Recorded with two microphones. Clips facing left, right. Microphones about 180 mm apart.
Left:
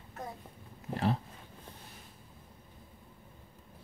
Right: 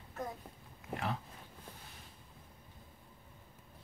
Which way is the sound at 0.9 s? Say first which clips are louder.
Left 7 dB; 35° left (ahead or behind).